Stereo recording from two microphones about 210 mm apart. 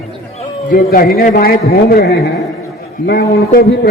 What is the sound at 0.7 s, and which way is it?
A man's voice, 45° left (ahead or behind).